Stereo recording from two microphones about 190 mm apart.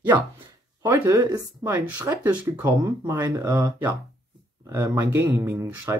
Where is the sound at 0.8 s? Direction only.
15° right (ahead or behind).